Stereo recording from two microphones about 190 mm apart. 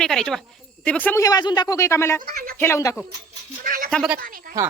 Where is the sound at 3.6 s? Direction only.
50° right (ahead or behind).